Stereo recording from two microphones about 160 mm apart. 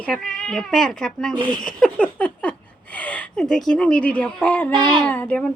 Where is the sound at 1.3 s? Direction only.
30° right (ahead or behind).